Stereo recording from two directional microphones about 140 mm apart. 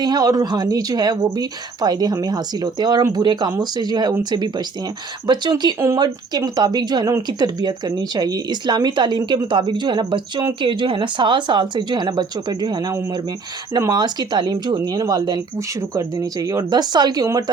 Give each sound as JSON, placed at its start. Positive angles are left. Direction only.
{"t": 0.0, "sound": "speech", "side_deg": -30}